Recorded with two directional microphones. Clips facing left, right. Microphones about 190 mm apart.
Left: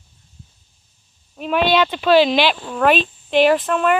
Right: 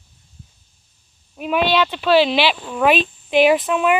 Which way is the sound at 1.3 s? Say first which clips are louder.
Left 1 dB; 5° right (ahead or behind).